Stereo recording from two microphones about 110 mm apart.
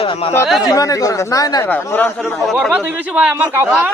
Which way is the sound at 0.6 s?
35° left (ahead or behind).